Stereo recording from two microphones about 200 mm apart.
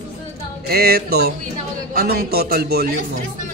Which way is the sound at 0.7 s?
50° right (ahead or behind).